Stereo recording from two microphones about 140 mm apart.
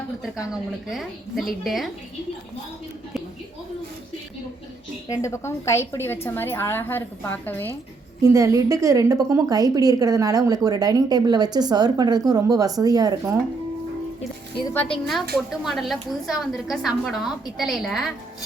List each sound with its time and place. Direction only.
0.5 s a woman's voice: centre (ahead or behind)
5.0 s a woman's voice: 25° left (ahead or behind)
8.2 s a woman's voice: 20° right (ahead or behind)
14.7 s a woman's voice: 10° left (ahead or behind)
15.4 s a woman's voice: centre (ahead or behind)